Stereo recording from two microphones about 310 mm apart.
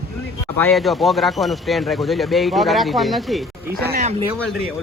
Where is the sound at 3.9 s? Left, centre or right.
Right.